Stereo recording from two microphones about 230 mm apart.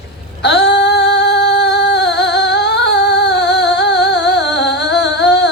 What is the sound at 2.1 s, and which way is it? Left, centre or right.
Music, left.